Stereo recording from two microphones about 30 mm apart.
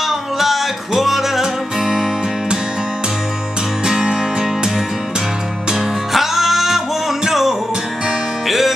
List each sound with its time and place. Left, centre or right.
0.0 s music: centre
3.8 s music: right
6.1 s music: centre